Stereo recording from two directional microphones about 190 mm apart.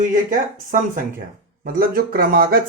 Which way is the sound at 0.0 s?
45° right (ahead or behind).